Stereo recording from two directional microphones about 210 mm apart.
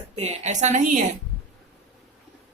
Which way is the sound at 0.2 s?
35° right (ahead or behind).